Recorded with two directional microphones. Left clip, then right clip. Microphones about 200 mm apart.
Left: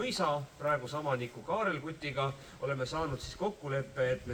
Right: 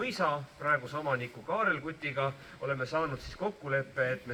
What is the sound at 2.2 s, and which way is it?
A man's voice, 45° left (ahead or behind).